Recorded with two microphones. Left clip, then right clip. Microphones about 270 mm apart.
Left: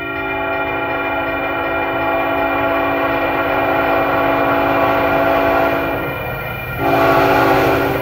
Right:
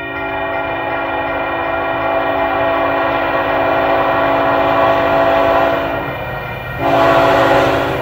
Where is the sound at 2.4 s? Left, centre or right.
Centre.